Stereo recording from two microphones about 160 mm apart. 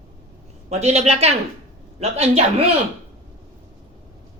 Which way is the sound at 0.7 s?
40° right (ahead or behind).